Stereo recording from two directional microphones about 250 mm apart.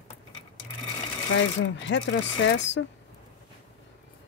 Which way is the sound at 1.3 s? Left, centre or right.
Left.